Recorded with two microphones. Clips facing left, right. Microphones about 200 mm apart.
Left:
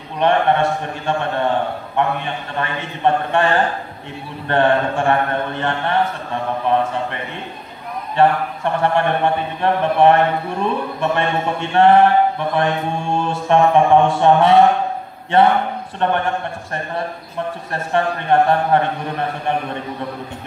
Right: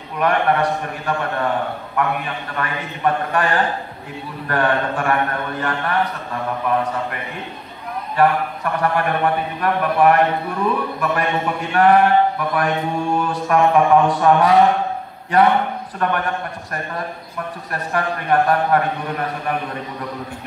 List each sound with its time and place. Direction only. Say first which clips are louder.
0.2 s speech: left 2 dB; 25° left (ahead or behind)
8.2 s speech: left 2 dB; 25° left (ahead or behind)